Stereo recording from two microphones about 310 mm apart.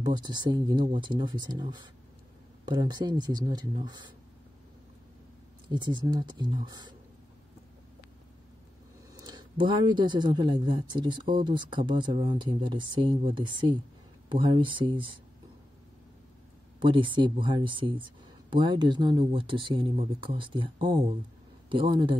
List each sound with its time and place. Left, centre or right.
0.0 s speech: centre
5.7 s speech: centre
9.2 s speech: centre
16.8 s speech: centre